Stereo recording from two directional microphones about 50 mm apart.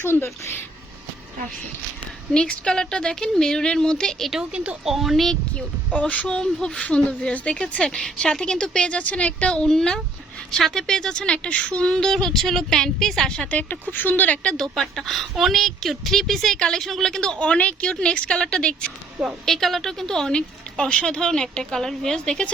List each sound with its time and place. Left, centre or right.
0.0 s speech: left
2.3 s a woman's voice: centre
4.5 s speech: right
4.9 s a woman's voice: centre
5.3 s a woman's voice: left
6.7 s a woman's voice: left
7.9 s a woman's voice: centre
13.5 s speech: left
14.4 s a woman's voice: centre
17.2 s a woman's voice: centre
19.5 s a woman's voice: centre